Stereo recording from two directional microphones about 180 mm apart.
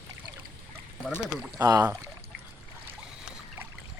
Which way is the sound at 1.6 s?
20° right (ahead or behind).